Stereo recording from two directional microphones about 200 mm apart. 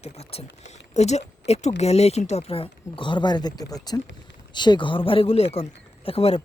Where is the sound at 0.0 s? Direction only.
30° left (ahead or behind).